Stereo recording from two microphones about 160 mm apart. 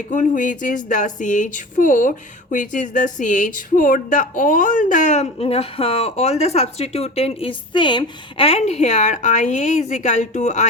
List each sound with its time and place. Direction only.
0.1 s speech: 55° left (ahead or behind)